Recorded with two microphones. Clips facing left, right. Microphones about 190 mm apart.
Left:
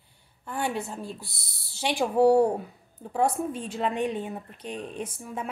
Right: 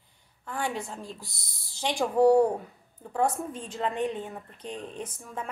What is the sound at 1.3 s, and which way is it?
Speech, 70° left (ahead or behind).